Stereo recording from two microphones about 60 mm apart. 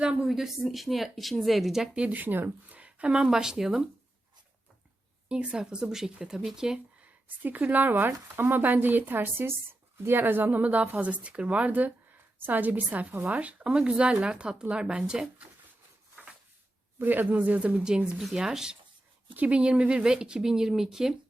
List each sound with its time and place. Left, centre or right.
0.0 s speech: centre
0.3 s speech: centre
2.1 s speech: right; by 3.8 s centre
5.3 s speech: centre
7.0 s a woman's voice: right
16.2 s a sound: right
17.0 s a woman's voice: right
17.8 s speech: centre